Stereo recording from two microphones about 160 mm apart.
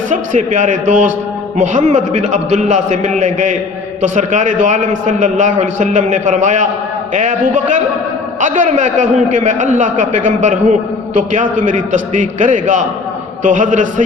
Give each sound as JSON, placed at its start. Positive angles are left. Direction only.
{"t": 0.1, "sound": "a man's voice", "side_deg": -50}